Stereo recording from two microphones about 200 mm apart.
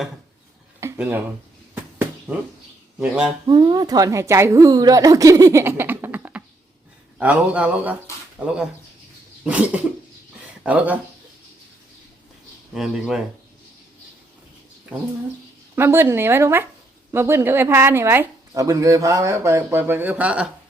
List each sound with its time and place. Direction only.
0.8 s a sound: 10° right (ahead or behind)
3.0 s speech: 5° right (ahead or behind)
3.4 s speech: 20° right (ahead or behind)
12.7 s speech: centre (ahead or behind)
14.9 s speech: 5° right (ahead or behind)